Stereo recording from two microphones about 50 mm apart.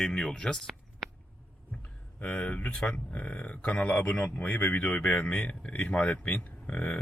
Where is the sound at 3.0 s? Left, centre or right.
Left.